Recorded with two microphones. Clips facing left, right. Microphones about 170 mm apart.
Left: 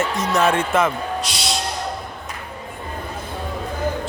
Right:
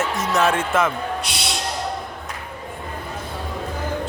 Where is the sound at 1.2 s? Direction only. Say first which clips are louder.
Left 2 dB; 60° right (ahead or behind).